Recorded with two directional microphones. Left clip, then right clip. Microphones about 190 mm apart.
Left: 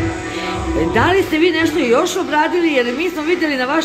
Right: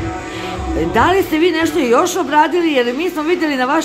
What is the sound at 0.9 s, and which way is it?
A woman's voice, 15° right (ahead or behind).